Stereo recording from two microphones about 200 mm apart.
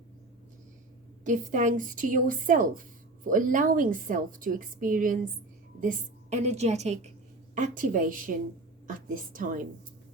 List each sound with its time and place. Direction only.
1.2 s a woman's voice: 40° right (ahead or behind)